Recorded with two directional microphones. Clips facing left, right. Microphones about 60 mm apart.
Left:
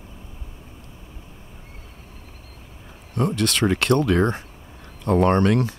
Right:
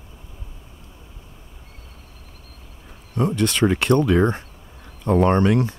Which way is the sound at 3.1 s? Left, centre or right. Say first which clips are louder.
Right 1 dB; centre.